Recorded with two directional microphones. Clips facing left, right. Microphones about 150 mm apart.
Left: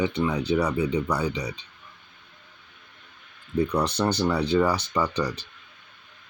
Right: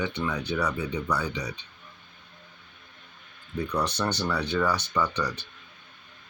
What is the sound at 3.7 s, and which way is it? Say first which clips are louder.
Speech: even; 30° left (ahead or behind).